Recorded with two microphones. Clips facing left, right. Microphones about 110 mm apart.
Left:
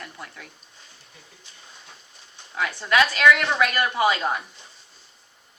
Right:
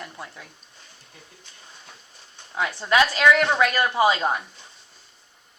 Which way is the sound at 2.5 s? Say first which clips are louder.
Right 1 dB; 25° right (ahead or behind).